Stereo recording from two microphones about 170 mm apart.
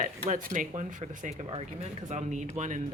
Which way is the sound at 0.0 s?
50° right (ahead or behind).